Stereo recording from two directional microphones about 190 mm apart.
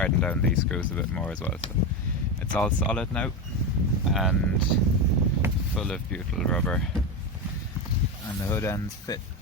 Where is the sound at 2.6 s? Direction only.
5° left (ahead or behind).